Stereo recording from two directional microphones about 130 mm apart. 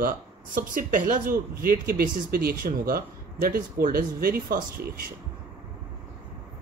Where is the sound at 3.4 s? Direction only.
90° right.